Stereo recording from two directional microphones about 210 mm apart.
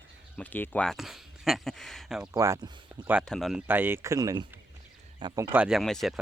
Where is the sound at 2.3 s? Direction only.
15° right (ahead or behind).